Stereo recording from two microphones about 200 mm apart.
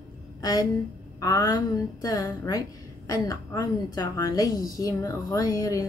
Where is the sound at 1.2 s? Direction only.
15° left (ahead or behind).